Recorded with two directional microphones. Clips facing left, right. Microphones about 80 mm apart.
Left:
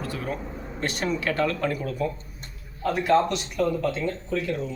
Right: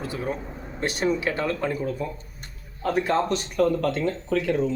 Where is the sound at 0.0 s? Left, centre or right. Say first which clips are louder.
Right 1 dB; right.